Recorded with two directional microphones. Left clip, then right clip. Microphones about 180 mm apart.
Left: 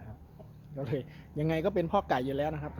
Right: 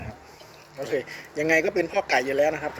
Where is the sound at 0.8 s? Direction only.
10° left (ahead or behind).